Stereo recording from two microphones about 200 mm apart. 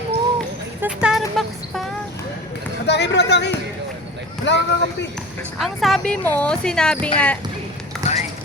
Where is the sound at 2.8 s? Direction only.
60° left (ahead or behind).